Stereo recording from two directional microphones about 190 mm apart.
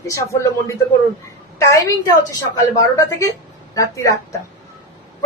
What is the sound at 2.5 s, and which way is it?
A woman's voice, 20° left (ahead or behind).